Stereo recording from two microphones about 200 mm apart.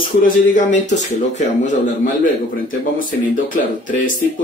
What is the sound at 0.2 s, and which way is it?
Speech, 40° left (ahead or behind).